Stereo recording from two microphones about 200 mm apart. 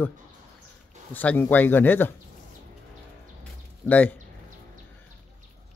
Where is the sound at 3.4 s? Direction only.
10° left (ahead or behind).